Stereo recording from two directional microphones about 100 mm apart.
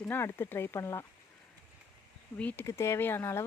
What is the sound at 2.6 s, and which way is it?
Speech, 30° left (ahead or behind).